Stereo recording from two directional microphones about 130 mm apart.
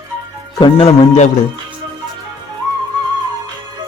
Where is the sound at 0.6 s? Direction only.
45° left (ahead or behind).